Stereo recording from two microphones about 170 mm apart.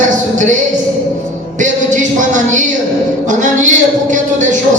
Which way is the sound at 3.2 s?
45° right (ahead or behind).